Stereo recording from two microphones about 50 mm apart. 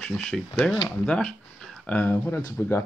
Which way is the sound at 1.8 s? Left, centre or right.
Left.